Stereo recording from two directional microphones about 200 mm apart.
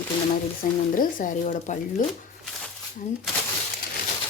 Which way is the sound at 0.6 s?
45° left (ahead or behind).